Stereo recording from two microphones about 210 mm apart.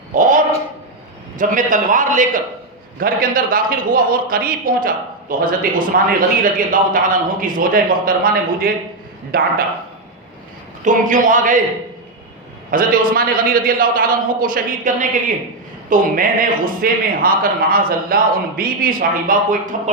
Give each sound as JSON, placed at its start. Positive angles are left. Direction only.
{"t": 0.1, "sound": "a sound", "side_deg": -40}
{"t": 1.4, "sound": "a man's voice", "side_deg": -40}
{"t": 10.8, "sound": "a man's voice", "side_deg": -40}
{"t": 12.7, "sound": "a man's voice", "side_deg": -40}